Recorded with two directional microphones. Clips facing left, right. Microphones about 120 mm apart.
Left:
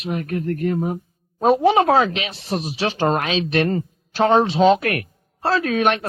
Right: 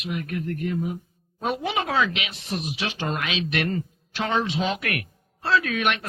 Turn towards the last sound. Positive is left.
turn(degrees=35)  # may be behind; listen again after turning